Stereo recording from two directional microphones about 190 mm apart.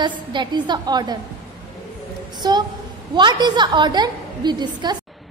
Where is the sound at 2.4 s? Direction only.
20° right (ahead or behind).